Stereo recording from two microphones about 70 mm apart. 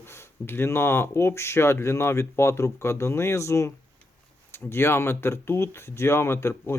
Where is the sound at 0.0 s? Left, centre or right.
Left.